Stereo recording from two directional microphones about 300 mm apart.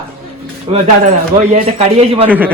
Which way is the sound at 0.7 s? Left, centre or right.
Right.